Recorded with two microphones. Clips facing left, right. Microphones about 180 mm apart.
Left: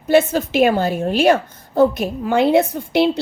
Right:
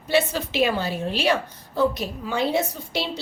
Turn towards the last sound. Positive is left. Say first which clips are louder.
# left 12 dB
turn(degrees=55)  # may be behind; listen again after turning